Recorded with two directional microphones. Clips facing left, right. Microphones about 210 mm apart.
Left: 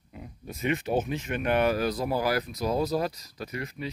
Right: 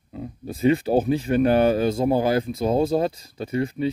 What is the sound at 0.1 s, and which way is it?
Speech, 30° right (ahead or behind).